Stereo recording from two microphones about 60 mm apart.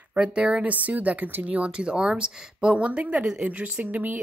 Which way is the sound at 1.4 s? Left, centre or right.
Centre.